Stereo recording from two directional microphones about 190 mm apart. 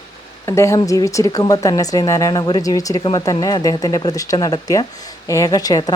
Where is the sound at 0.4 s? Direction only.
15° left (ahead or behind).